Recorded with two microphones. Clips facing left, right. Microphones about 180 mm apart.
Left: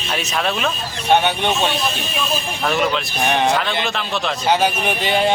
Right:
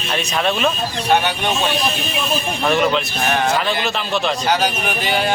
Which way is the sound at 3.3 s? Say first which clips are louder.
Left 1 dB; 20° left (ahead or behind).